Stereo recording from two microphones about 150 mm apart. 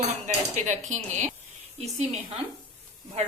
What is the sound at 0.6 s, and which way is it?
Speech, 55° right (ahead or behind).